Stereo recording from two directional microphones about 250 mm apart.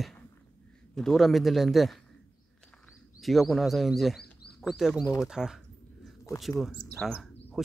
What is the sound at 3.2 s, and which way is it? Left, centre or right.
Speech, centre.